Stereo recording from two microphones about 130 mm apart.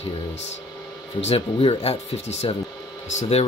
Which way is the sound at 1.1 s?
50° left (ahead or behind).